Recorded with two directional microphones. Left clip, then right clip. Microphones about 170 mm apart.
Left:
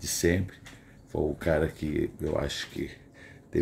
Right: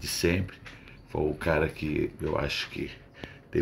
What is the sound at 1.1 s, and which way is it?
Speech, 25° left (ahead or behind).